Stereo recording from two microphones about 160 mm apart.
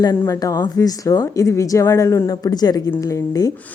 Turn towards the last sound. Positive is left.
turn(degrees=20)  # may be behind; listen again after turning